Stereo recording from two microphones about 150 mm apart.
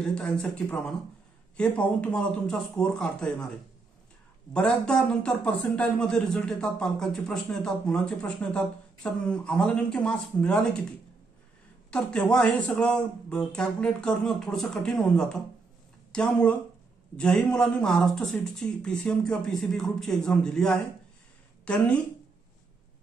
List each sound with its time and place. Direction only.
0.0 s a man's voice: 5° left (ahead or behind)
4.6 s a man's voice: 5° left (ahead or behind)
11.9 s a man's voice: 5° left (ahead or behind)